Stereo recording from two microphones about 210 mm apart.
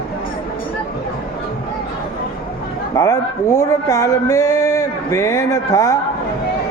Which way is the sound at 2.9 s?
15° left (ahead or behind).